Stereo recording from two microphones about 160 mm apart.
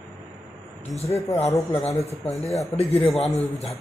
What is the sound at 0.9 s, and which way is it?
Speech, 40° left (ahead or behind).